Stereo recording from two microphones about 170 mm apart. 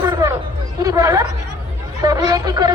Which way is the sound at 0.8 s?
20° right (ahead or behind).